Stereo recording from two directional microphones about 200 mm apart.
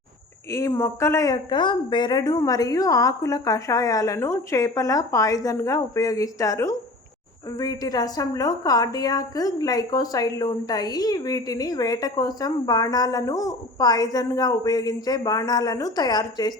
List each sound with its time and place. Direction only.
0.5 s a woman's voice: 15° left (ahead or behind)